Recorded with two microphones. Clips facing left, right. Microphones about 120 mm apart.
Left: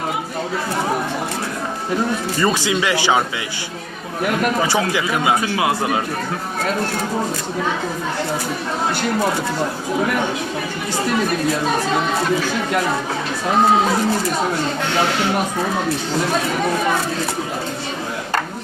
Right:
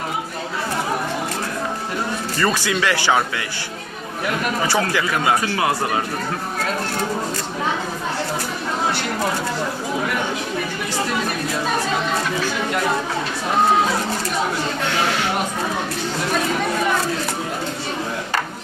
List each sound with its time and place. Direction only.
2.4 s speech: 15° left (ahead or behind)
4.7 s speech: 15° left (ahead or behind)